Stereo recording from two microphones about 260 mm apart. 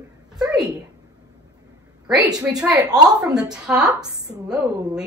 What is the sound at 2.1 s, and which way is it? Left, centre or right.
Speech, centre.